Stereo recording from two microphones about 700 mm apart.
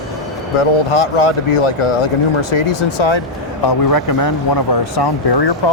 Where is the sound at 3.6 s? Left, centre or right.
Left.